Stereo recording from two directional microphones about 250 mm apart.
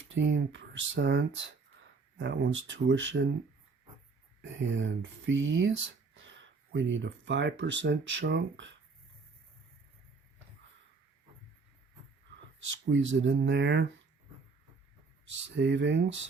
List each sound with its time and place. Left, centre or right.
0.0 s speech: right
4.4 s speech: right
12.7 s speech: right
15.3 s speech: right